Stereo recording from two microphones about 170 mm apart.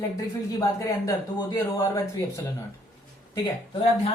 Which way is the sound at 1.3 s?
20° left (ahead or behind).